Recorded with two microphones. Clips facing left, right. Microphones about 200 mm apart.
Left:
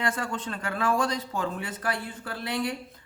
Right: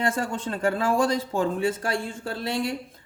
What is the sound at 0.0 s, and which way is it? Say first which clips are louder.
Speech: right 4 dB; 25° right (ahead or behind).